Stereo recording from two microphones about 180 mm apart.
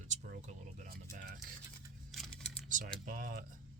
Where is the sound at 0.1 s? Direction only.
50° right (ahead or behind).